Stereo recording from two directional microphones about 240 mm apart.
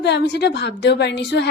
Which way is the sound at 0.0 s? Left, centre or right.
Left.